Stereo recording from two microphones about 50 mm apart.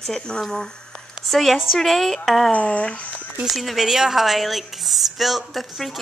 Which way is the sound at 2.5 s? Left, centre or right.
Left.